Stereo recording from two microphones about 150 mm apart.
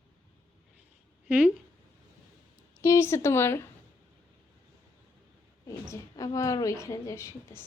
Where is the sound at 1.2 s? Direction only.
10° right (ahead or behind).